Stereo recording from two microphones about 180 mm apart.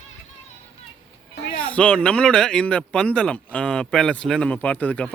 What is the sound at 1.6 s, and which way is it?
Speech, 5° left (ahead or behind).